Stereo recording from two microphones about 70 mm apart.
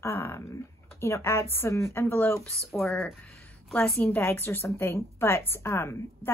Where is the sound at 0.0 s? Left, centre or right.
Left.